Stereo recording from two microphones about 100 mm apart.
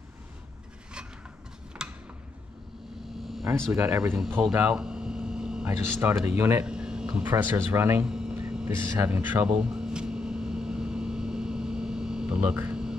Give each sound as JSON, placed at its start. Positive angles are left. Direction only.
{"t": 1.8, "sound": "tick-tock", "side_deg": -5}
{"t": 3.7, "sound": "speech", "side_deg": -25}
{"t": 4.4, "sound": "a sound", "side_deg": -15}
{"t": 5.7, "sound": "speech", "side_deg": -20}
{"t": 6.6, "sound": "speech", "side_deg": -10}
{"t": 8.0, "sound": "hum", "side_deg": -10}
{"t": 8.6, "sound": "a sound", "side_deg": -25}